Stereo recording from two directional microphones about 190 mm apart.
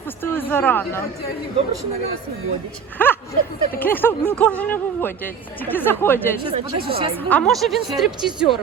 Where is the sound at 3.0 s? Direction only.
10° left (ahead or behind).